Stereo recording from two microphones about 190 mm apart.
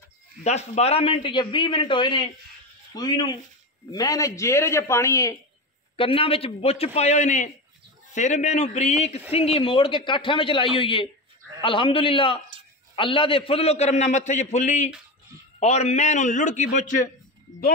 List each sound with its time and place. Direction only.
0.4 s a man's voice: 35° left (ahead or behind); by 5.4 s 15° left (ahead or behind)
5.9 s a man's voice: 30° left (ahead or behind)